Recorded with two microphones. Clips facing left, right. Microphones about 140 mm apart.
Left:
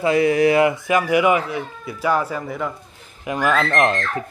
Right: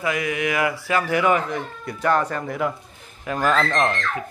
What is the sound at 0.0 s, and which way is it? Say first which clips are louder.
Speech: left 8 dB; 30° left (ahead or behind).